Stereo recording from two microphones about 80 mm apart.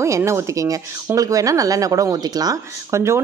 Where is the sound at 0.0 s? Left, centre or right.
Right.